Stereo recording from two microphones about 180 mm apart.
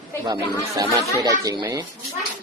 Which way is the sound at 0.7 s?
20° right (ahead or behind).